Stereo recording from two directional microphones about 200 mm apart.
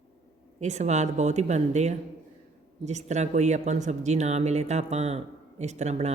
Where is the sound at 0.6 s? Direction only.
35° right (ahead or behind).